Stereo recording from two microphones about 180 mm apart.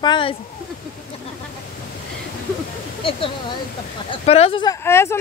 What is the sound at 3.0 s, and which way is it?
Speech, 30° left (ahead or behind).